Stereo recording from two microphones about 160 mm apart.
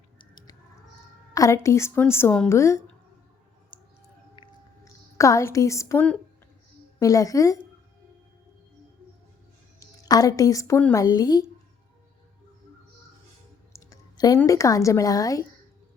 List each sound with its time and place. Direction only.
1.3 s a woman's voice: 20° left (ahead or behind)
3.7 s a sound: 30° left (ahead or behind)
4.4 s chewing: 30° left (ahead or behind)
4.9 s a woman's voice: 20° left (ahead or behind)
9.8 s a woman's voice: 20° left (ahead or behind)
13.7 s speech: 20° left (ahead or behind)